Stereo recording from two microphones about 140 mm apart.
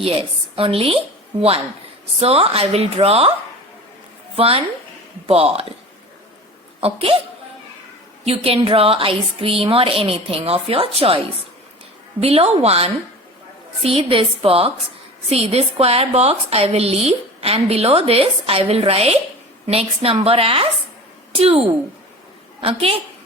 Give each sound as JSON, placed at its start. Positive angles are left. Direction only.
{"t": 0.0, "sound": "a woman's voice", "side_deg": -40}
{"t": 2.2, "sound": "a woman's voice", "side_deg": -45}
{"t": 4.4, "sound": "a woman's voice", "side_deg": -45}
{"t": 6.7, "sound": "a woman's voice", "side_deg": -40}
{"t": 8.2, "sound": "a woman's voice", "side_deg": -45}
{"t": 12.2, "sound": "a woman's voice", "side_deg": -45}